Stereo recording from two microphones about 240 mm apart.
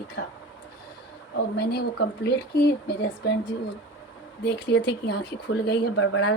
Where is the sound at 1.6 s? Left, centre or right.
Left.